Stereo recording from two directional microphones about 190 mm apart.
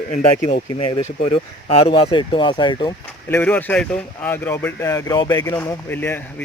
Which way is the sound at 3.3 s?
10° left (ahead or behind).